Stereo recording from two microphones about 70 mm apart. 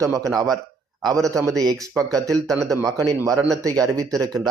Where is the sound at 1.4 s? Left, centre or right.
Right.